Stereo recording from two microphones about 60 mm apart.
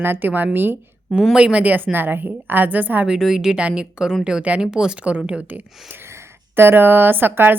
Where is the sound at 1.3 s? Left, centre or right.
Centre.